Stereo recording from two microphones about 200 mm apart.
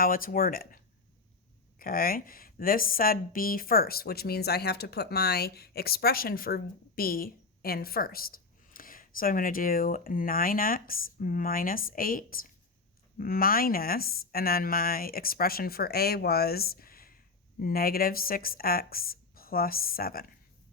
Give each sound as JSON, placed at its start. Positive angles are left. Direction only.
{"t": 0.0, "sound": "a woman's voice", "side_deg": 45}
{"t": 1.8, "sound": "a woman's voice", "side_deg": 45}